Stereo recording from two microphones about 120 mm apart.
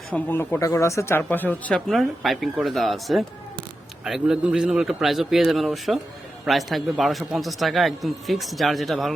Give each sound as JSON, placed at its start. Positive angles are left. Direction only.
{"t": 0.1, "sound": "speech", "side_deg": 15}
{"t": 1.9, "sound": "a man's voice", "side_deg": 0}